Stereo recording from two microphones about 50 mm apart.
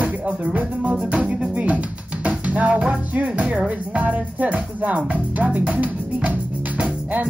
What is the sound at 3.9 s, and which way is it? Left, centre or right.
Music, right.